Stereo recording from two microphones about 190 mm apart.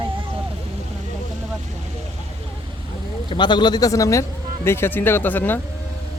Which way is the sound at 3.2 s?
25° left (ahead or behind).